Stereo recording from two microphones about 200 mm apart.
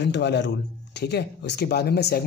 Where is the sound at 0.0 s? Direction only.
60° left (ahead or behind).